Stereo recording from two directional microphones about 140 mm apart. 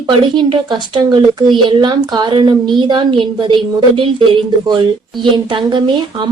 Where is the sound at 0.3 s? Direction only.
35° right (ahead or behind).